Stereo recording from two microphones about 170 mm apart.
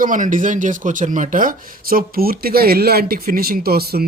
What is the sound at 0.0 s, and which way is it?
Speech, 50° right (ahead or behind).